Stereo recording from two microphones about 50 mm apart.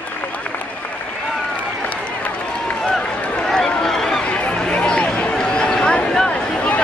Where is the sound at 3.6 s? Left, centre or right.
Centre.